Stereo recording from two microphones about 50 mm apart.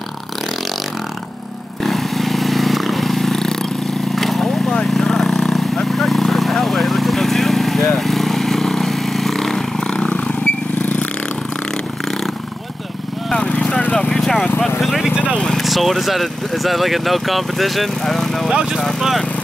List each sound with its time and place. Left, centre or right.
1.8 s vehicle: centre; by 11.1 s left
13.3 s vehicle: centre
14.8 s vehicle: centre
15.6 s speech: centre
18.5 s speech: centre
18.9 s speech: centre